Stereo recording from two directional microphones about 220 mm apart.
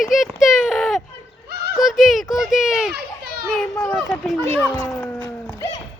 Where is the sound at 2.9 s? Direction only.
45° right (ahead or behind).